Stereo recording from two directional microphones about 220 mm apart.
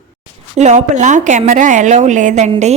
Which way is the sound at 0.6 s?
30° right (ahead or behind).